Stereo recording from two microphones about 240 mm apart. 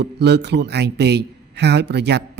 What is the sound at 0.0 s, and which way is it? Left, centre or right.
A man's voice, right.